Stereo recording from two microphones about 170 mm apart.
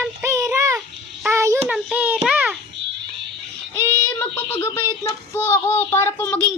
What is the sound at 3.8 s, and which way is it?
Child singing, 15° left (ahead or behind).